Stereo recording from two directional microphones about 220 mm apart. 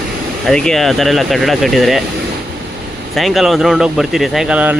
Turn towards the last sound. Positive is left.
turn(degrees=-5)  # may be behind; listen again after turning